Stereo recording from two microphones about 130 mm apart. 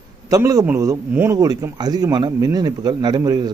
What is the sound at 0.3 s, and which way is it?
A man's voice, 25° right (ahead or behind).